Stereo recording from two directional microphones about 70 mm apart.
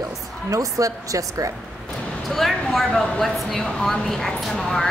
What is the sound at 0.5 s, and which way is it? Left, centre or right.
A woman's voice, right.